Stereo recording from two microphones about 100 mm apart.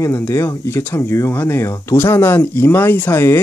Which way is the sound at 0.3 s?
25° left (ahead or behind).